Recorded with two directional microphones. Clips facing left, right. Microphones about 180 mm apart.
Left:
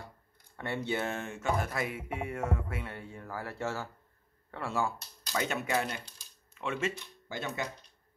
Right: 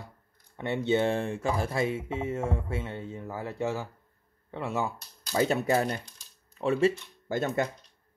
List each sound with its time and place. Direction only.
0.6 s speech: 20° right (ahead or behind)
5.4 s speech: 35° right (ahead or behind)